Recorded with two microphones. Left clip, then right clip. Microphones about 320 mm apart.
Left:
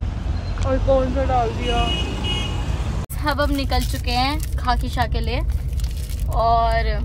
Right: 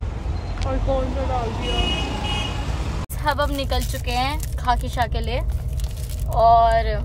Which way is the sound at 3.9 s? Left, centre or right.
Centre.